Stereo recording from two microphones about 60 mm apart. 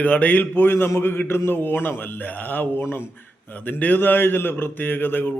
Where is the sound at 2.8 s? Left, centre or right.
Left.